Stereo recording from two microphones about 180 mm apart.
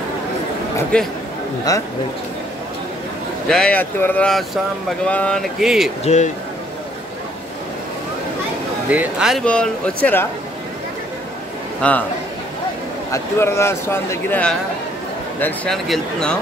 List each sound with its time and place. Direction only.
0.9 s speech: 5° left (ahead or behind)
1.7 s speech: 20° left (ahead or behind)
3.4 s speech: 5° left (ahead or behind)
6.0 s speech: 40° left (ahead or behind)
8.9 s speech: 5° right (ahead or behind)
11.8 s speech: 5° left (ahead or behind)
13.1 s speech: 15° left (ahead or behind)